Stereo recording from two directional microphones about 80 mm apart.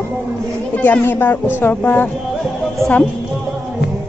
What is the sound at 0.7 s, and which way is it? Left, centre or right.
Speech, centre.